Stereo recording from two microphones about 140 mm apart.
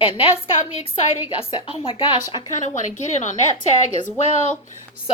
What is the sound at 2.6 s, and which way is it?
Speech, 60° left (ahead or behind).